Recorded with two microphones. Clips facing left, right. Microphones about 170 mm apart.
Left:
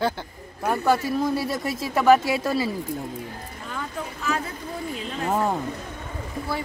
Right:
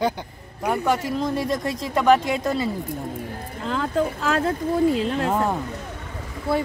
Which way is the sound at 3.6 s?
85° right.